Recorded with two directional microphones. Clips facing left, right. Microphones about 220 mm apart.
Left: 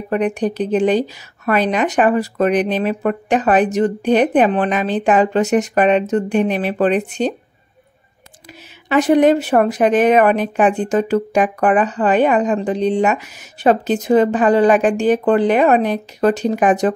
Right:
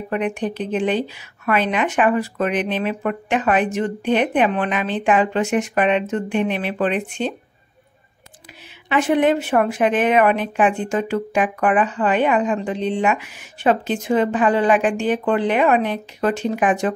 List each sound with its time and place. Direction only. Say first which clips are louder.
0.1 s a woman's voice: left 5 dB; 40° left (ahead or behind)
8.8 s a woman's voice: left 5 dB; 40° left (ahead or behind)